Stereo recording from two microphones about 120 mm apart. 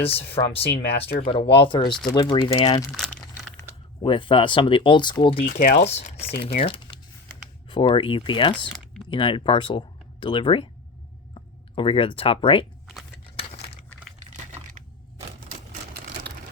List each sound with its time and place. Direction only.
0.1 s speech: 55° left (ahead or behind); by 2.8 s 35° left (ahead or behind)
4.0 s speech: 45° left (ahead or behind)
5.5 s speech: 90° left; by 12.6 s 50° left (ahead or behind)